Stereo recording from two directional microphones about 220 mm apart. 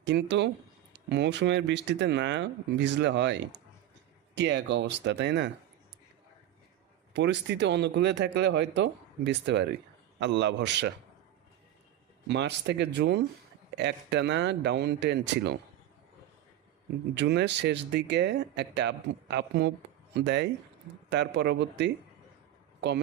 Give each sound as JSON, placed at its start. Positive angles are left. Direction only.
{"t": 0.0, "sound": "speech", "side_deg": -50}
{"t": 7.1, "sound": "speech", "side_deg": -50}
{"t": 12.3, "sound": "speech", "side_deg": -50}
{"t": 17.2, "sound": "speech", "side_deg": -50}